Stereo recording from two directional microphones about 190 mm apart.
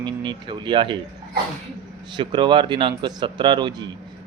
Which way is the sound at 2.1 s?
25° right (ahead or behind).